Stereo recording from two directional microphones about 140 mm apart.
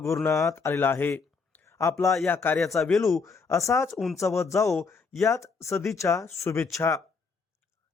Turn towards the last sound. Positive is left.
turn(degrees=20)  # may be behind; listen again after turning